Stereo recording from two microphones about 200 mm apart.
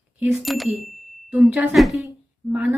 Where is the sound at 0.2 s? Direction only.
Centre (ahead or behind).